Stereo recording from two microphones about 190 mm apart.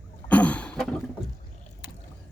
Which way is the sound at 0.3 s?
5° left (ahead or behind).